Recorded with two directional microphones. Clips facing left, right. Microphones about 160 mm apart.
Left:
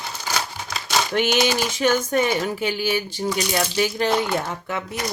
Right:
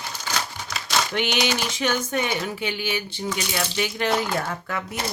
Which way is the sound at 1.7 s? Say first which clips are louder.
Left 5 dB; 45° left (ahead or behind).